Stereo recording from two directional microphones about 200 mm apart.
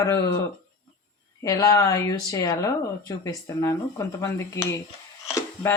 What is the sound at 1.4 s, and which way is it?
Speech, 15° left (ahead or behind).